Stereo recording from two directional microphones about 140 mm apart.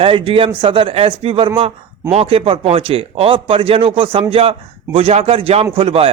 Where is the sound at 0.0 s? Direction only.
40° right (ahead or behind).